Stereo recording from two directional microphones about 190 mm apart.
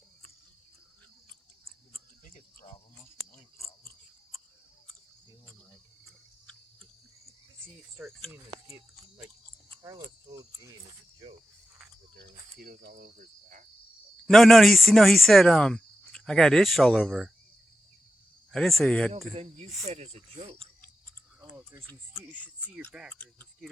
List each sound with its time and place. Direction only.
2.3 s cricket: 35° left (ahead or behind)
3.3 s a sound: 15° left (ahead or behind)
8.3 s speech: 10° right (ahead or behind)
12.2 s speech: 60° right (ahead or behind)
13.1 s cricket: 45° right (ahead or behind)
14.3 s speech: centre (ahead or behind)
18.5 s speech: centre (ahead or behind)
19.3 s speech: 30° right (ahead or behind)
22.2 s speech: 5° right (ahead or behind)
23.1 s speech: 10° left (ahead or behind)